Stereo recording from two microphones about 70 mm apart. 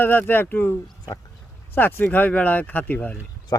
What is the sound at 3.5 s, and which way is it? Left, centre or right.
Speech, left.